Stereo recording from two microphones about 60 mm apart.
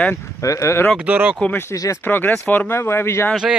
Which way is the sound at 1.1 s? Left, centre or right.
Right.